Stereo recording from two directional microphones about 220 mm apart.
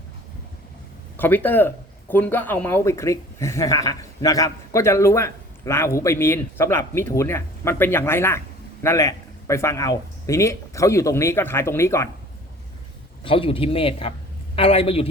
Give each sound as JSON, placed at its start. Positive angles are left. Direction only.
{"t": 1.1, "sound": "speech", "side_deg": 10}
{"t": 13.2, "sound": "speech", "side_deg": 25}